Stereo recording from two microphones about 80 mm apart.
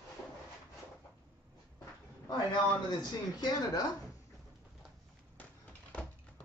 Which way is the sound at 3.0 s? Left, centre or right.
Left.